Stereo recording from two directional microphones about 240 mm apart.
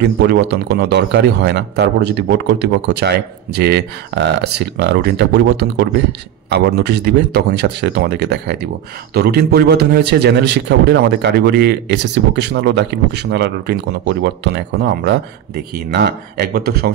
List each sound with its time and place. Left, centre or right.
0.0 s a man's voice: right